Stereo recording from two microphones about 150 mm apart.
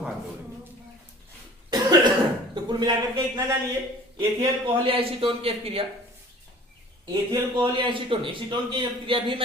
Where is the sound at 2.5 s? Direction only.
25° right (ahead or behind).